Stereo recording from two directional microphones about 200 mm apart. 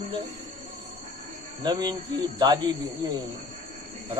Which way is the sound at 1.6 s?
20° right (ahead or behind).